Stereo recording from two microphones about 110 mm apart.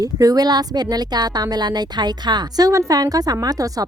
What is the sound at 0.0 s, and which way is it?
Speech, 35° right (ahead or behind).